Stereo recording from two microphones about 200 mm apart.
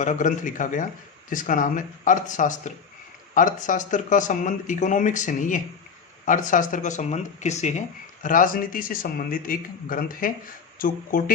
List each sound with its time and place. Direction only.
0.0 s speech: 40° left (ahead or behind)